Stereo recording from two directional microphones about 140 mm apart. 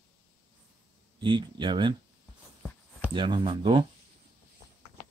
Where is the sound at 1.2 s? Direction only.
35° right (ahead or behind).